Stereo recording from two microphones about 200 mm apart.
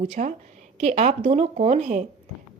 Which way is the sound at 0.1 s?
35° right (ahead or behind).